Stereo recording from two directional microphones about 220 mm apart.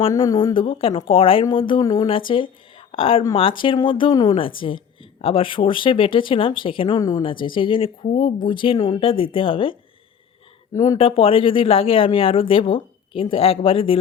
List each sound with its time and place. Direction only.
0.0 s speech: 20° left (ahead or behind)
10.9 s speech: 25° left (ahead or behind)